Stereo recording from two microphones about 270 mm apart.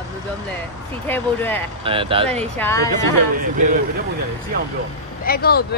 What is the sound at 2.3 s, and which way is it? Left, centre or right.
Speech, centre.